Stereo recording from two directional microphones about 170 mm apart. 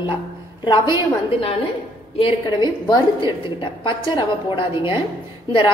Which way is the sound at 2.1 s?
30° left (ahead or behind).